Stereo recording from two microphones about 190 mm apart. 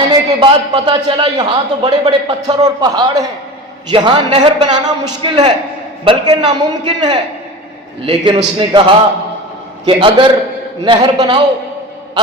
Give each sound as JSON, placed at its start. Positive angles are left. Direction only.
{"t": 0.1, "sound": "a man's voice", "side_deg": -25}
{"t": 9.8, "sound": "a man's voice", "side_deg": -25}